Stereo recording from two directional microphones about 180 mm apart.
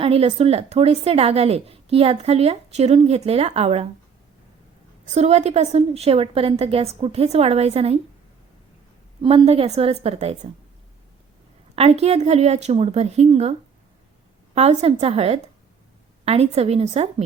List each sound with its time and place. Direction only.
0.0 s a woman's voice: 35° right (ahead or behind)
5.0 s a woman's voice: 35° right (ahead or behind)
9.2 s a woman's voice: 30° right (ahead or behind)
11.7 s a woman's voice: 35° right (ahead or behind)